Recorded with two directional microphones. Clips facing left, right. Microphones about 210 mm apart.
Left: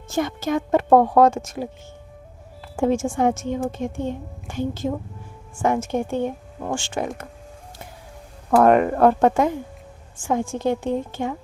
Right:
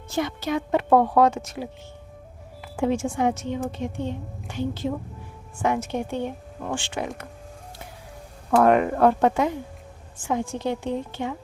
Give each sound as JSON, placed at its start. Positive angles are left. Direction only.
{"t": 0.1, "sound": "a woman's voice", "side_deg": 45}
{"t": 2.7, "sound": "a woman's voice", "side_deg": 45}
{"t": 8.5, "sound": "a woman's voice", "side_deg": 45}